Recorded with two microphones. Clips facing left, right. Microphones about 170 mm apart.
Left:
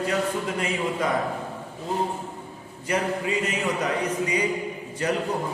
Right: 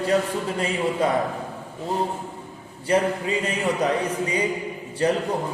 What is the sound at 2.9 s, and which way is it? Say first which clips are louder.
Speech: right 5 dB; 30° right (ahead or behind).